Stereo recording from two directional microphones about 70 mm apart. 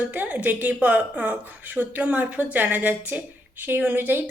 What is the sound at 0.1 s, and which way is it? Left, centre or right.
A woman's voice, right.